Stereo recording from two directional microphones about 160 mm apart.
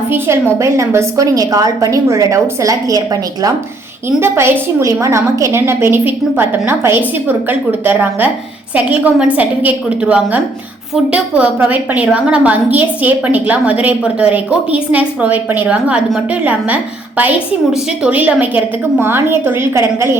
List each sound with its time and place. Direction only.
0.6 s a woman's voice: 20° right (ahead or behind)